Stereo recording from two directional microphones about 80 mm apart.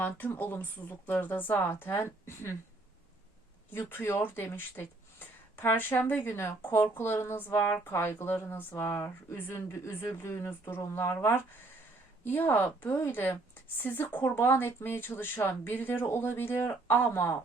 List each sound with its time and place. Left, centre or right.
0.0 s speech: left
3.7 s speech: left